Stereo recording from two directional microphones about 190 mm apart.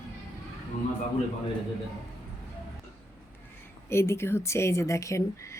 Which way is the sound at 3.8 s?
15° left (ahead or behind).